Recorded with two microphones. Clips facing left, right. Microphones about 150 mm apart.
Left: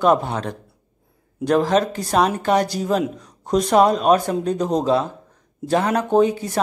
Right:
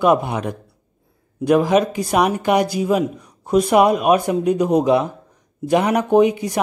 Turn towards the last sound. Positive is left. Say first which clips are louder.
# right 2 dB
turn(degrees=-15)  # may be behind; listen again after turning